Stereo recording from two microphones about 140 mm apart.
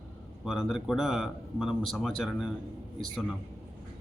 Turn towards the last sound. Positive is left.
turn(degrees=0)  # may be behind; listen again after turning